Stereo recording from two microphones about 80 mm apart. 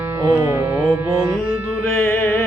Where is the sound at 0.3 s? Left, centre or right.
Right.